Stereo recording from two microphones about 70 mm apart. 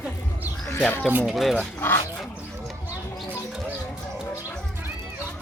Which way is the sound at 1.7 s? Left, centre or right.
Left.